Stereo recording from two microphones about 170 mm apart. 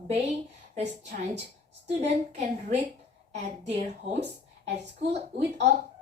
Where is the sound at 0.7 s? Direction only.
45° right (ahead or behind).